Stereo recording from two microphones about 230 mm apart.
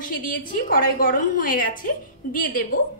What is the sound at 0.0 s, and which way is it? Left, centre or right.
A woman's voice, left.